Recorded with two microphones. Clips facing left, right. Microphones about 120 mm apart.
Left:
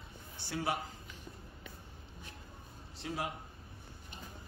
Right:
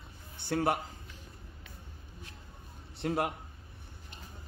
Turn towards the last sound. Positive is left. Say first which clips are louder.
# right 7 dB
turn(degrees=-60)  # may be behind; listen again after turning